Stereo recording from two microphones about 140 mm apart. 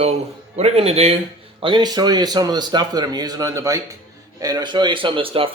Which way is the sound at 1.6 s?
35° right (ahead or behind).